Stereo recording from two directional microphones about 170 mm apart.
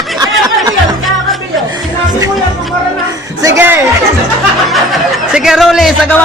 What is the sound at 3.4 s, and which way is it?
Speech, 15° right (ahead or behind).